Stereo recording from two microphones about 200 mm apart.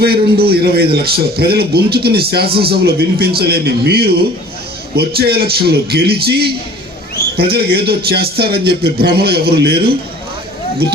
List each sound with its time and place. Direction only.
0.0 s a man's voice: 50° right (ahead or behind)